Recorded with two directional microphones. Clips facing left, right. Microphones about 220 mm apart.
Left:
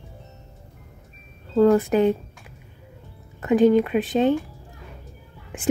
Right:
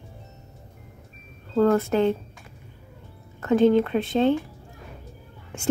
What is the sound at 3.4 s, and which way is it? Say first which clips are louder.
Speech: left 2 dB; 15° left (ahead or behind).